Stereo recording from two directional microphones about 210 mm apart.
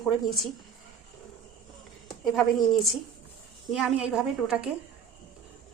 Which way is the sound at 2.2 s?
Centre (ahead or behind).